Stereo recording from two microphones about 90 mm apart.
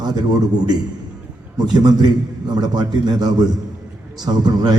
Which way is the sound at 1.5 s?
50° right (ahead or behind).